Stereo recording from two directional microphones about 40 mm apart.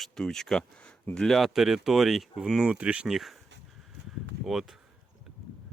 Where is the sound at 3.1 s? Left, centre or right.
Centre.